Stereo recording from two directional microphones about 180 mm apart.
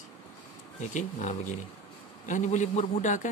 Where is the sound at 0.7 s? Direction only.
40° left (ahead or behind).